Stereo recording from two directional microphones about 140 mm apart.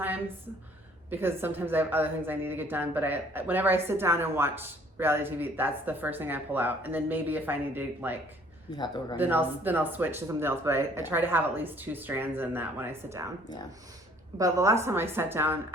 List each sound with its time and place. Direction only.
1.1 s a woman's voice: 15° right (ahead or behind)
8.7 s speech: 30° left (ahead or behind)
9.1 s a woman's voice: 15° right (ahead or behind)
14.3 s a woman's voice: 20° right (ahead or behind)